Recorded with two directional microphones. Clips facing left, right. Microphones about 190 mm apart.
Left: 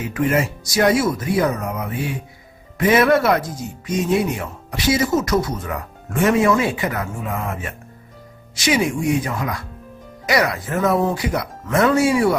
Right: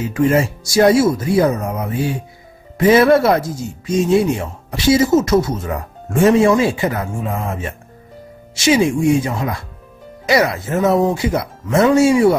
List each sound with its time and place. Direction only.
0.0 s speech: 30° right (ahead or behind)